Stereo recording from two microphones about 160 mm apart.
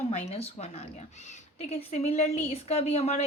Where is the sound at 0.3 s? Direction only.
40° left (ahead or behind).